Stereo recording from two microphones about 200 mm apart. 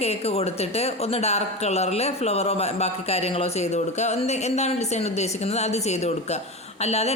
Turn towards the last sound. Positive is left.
turn(degrees=30)  # may be behind; listen again after turning